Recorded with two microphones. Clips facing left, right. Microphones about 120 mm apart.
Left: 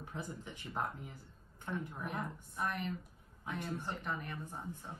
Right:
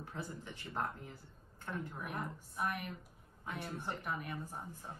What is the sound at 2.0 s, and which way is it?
A woman's voice, 5° right (ahead or behind).